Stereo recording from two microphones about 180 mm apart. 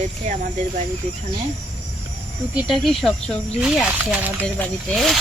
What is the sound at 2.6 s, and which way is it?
Speech, centre (ahead or behind).